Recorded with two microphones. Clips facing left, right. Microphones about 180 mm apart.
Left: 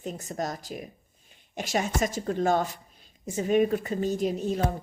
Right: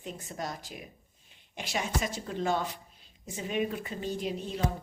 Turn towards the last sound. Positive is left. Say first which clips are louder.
# left 7 dB
turn(degrees=45)  # may be behind; listen again after turning